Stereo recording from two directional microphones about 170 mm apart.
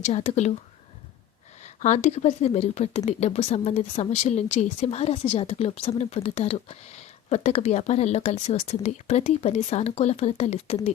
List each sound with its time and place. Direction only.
0.0 s a woman's voice: 40° left (ahead or behind)
1.6 s a woman's voice: 45° left (ahead or behind)